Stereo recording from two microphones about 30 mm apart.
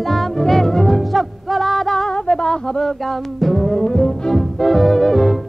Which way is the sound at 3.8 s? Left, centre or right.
Centre.